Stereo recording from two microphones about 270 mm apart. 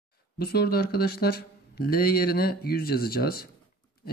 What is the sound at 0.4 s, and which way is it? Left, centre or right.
Speech, left.